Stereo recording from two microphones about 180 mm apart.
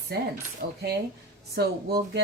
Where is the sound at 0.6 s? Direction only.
55° right (ahead or behind).